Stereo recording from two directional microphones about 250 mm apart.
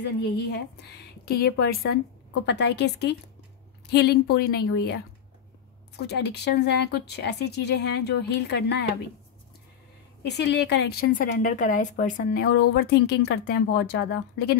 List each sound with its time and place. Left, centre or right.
0.0 s a woman's voice: left
10.2 s a woman's voice: left